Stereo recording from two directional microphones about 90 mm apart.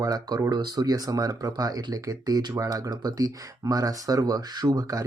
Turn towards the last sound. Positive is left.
turn(degrees=-40)  # may be behind; listen again after turning